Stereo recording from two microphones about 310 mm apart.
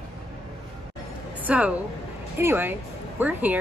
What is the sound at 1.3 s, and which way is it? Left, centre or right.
A woman's voice, centre.